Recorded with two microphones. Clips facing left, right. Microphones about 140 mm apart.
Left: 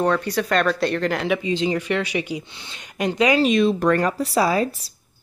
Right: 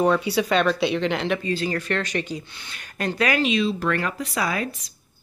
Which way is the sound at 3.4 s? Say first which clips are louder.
Left 5 dB; 50° left (ahead or behind).